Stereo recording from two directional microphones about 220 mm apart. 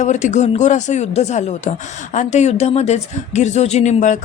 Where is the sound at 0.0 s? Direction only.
35° left (ahead or behind).